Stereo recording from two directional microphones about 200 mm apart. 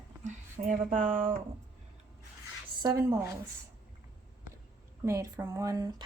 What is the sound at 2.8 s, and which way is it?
Speech, 15° right (ahead or behind).